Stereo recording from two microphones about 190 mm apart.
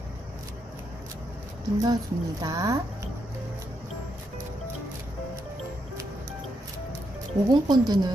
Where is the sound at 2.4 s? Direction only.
20° right (ahead or behind).